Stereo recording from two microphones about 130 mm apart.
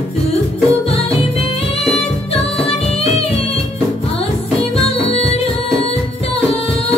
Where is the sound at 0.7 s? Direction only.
50° left (ahead or behind).